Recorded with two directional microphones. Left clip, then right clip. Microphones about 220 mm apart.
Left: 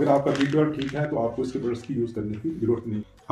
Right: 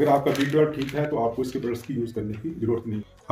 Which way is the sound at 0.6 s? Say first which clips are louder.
Right 2 dB; 30° right (ahead or behind).